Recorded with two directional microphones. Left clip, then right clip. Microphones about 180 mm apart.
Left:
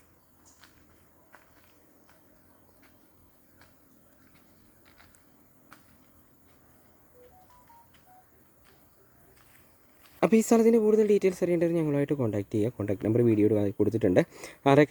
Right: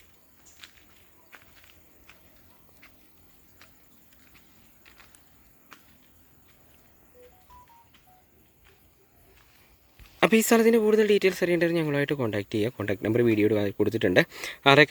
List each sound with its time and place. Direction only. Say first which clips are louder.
0.6 s a sound: right 9 dB; 65° left (ahead or behind)
1.3 s walk: right 5 dB; 65° left (ahead or behind)
10.2 s speech: right 2 dB; 5° left (ahead or behind)